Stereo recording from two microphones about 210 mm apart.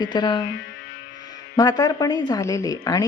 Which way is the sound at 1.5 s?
15° left (ahead or behind).